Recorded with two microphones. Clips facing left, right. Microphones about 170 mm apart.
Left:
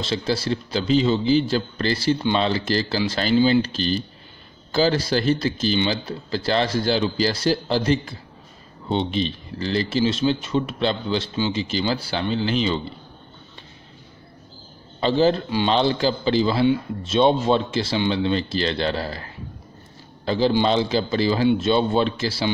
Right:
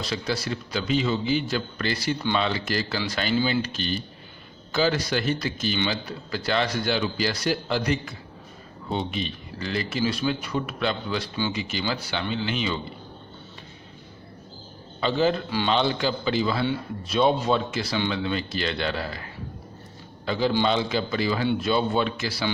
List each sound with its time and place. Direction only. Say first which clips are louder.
0.0 s speech: left 5 dB; 30° left (ahead or behind)
15.0 s a man's voice: left 4 dB; 35° left (ahead or behind)
20.2 s a man's voice: left 4 dB; 30° left (ahead or behind)